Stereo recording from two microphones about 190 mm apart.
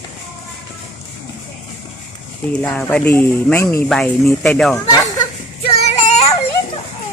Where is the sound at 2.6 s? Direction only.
5° left (ahead or behind).